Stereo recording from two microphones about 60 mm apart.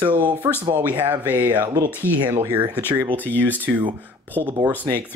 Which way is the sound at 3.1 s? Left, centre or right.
Left.